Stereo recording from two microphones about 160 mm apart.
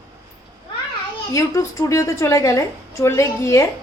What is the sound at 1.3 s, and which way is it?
A woman's voice, 20° left (ahead or behind).